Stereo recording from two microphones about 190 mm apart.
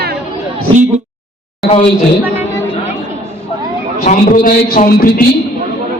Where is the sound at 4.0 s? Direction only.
50° left (ahead or behind).